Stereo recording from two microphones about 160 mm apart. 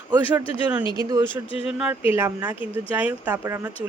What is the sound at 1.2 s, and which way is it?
Speech, 35° left (ahead or behind).